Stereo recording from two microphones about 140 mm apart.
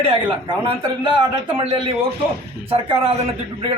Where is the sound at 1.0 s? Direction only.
35° right (ahead or behind).